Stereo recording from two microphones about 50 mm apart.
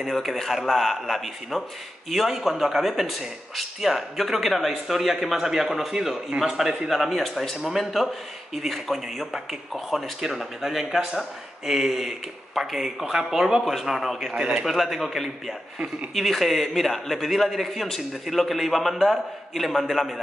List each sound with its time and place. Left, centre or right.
0.0 s speech: centre
14.3 s speech: centre
14.7 s speech: centre